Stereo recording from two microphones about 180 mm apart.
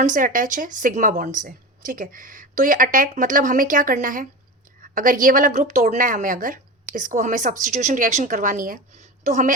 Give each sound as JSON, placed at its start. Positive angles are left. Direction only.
{"t": 0.0, "sound": "a woman's voice", "side_deg": -45}